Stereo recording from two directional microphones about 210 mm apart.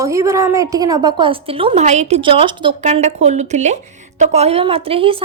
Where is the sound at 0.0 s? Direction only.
15° right (ahead or behind).